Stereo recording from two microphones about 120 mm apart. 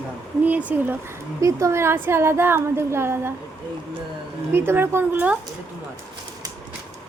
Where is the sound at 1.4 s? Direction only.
25° right (ahead or behind).